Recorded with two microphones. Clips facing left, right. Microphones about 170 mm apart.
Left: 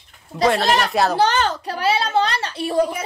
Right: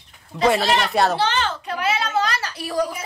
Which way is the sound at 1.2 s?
40° left (ahead or behind).